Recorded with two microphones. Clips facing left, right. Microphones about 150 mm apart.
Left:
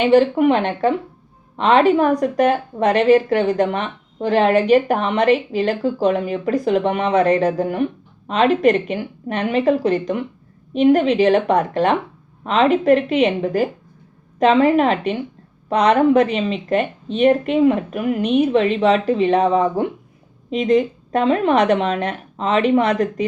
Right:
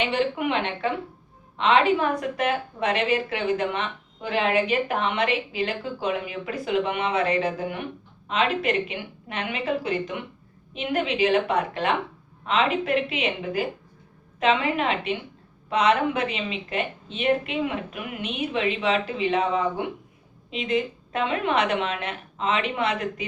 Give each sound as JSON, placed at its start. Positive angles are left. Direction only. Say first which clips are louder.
{"t": 0.0, "sound": "a woman's voice", "louder": "left 11 dB", "side_deg": 40}